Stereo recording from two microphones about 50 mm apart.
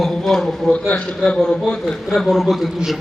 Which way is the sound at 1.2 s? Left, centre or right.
Centre.